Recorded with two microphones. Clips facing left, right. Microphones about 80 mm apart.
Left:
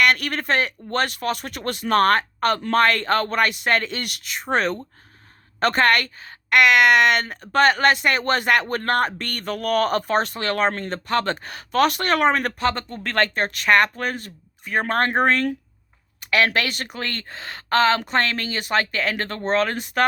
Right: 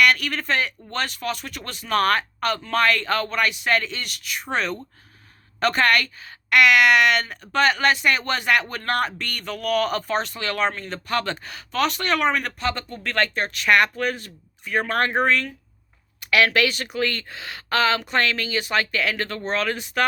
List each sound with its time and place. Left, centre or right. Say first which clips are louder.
0.0 s speech: even; left
4.2 s speech: left 4 dB; left